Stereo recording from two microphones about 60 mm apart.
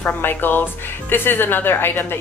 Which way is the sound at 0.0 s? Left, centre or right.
Left.